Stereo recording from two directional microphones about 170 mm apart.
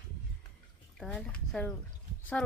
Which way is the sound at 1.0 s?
5° left (ahead or behind).